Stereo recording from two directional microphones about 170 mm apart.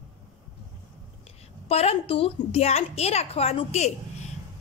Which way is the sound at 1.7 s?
35° left (ahead or behind).